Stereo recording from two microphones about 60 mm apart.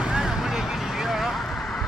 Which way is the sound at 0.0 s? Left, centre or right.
Centre.